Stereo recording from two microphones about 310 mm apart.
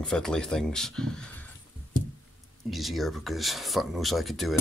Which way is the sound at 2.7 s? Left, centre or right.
Centre.